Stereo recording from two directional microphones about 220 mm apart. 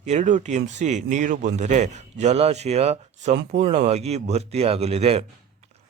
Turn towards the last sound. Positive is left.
turn(degrees=-25)  # may be behind; listen again after turning